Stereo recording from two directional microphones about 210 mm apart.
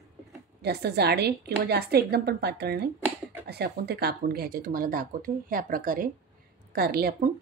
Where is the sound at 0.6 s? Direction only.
50° right (ahead or behind).